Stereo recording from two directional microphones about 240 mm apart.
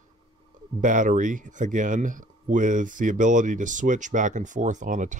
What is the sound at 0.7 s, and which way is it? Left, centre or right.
Speech, right.